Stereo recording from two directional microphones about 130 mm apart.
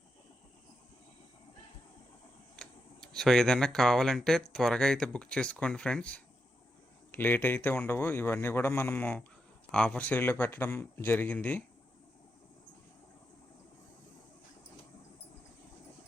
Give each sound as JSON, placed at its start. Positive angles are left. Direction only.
{"t": 2.6, "sound": "speech", "side_deg": 5}